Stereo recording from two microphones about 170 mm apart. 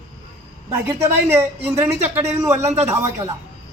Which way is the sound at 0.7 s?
15° right (ahead or behind).